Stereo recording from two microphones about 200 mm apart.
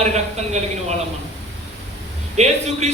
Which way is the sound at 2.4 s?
35° right (ahead or behind).